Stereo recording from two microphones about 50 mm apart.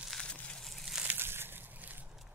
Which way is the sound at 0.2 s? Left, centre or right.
Left.